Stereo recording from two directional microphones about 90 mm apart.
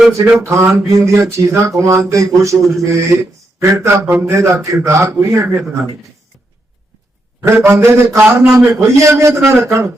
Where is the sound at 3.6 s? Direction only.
30° right (ahead or behind).